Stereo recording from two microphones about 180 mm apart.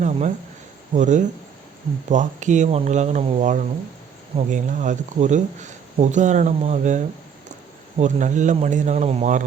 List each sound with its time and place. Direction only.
0.9 s speech: 40° right (ahead or behind)